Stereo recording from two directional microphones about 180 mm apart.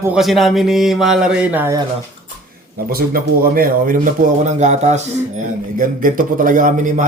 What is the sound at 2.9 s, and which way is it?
Speech, 55° right (ahead or behind).